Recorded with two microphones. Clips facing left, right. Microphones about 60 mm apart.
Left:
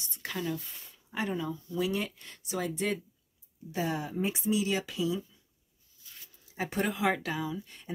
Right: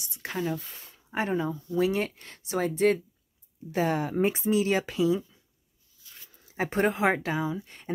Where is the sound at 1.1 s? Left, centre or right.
Right.